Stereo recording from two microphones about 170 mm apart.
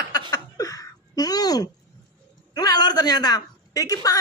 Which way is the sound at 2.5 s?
25° left (ahead or behind).